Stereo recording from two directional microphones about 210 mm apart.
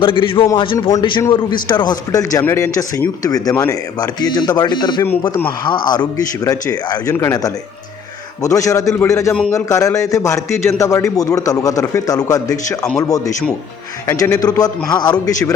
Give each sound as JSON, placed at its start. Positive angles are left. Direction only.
{"t": 0.0, "sound": "a man's voice", "side_deg": 25}